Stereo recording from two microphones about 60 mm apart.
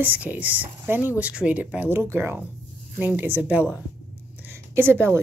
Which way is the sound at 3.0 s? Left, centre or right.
Right.